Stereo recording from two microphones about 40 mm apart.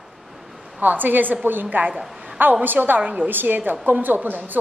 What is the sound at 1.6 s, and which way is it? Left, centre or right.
A woman's voice, right.